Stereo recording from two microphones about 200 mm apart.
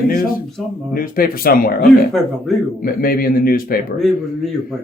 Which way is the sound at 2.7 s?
45° left (ahead or behind).